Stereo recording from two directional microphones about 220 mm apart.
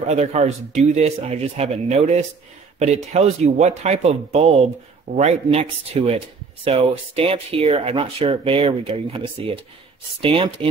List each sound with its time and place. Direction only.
0.0 s speech: 30° right (ahead or behind)